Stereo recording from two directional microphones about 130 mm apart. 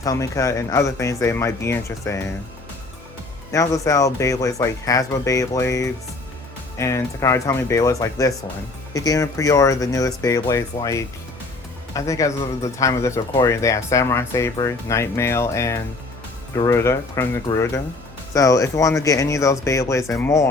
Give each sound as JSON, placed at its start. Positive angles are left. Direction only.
{"t": 0.0, "sound": "speech", "side_deg": 25}
{"t": 3.5, "sound": "speech", "side_deg": 25}